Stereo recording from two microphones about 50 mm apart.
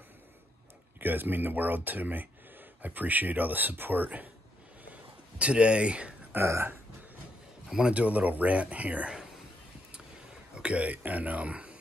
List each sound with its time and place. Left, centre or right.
0.9 s speech: right
5.4 s speech: right
6.3 s speech: right
7.9 s speech: right
9.1 s whispering: centre
10.5 s speech: right